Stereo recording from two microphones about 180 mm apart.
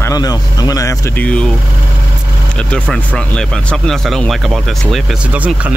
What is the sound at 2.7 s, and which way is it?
Speech, 5° left (ahead or behind).